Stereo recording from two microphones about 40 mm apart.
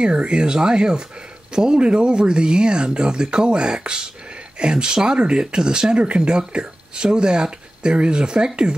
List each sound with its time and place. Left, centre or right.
0.0 s speech: right